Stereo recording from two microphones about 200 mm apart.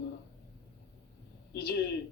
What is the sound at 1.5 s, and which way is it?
Speech, 55° left (ahead or behind).